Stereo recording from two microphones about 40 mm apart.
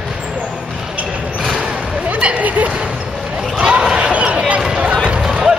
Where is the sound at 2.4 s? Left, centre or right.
Right.